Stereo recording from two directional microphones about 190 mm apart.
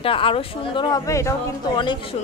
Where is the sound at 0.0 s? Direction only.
30° left (ahead or behind).